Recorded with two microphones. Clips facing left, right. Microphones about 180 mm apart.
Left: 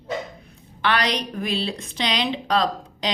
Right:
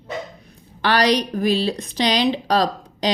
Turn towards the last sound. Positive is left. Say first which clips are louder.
# right 2 dB
turn(degrees=-35)  # may be behind; listen again after turning